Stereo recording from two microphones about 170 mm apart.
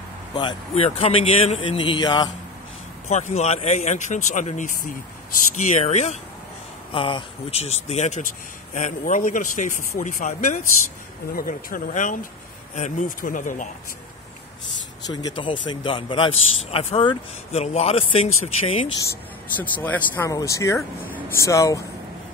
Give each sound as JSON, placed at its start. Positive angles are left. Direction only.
{"t": 0.3, "sound": "speech", "side_deg": 30}
{"t": 3.1, "sound": "speech", "side_deg": 45}
{"t": 6.9, "sound": "speech", "side_deg": 30}
{"t": 15.0, "sound": "speech", "side_deg": 25}
{"t": 19.8, "sound": "speech", "side_deg": 10}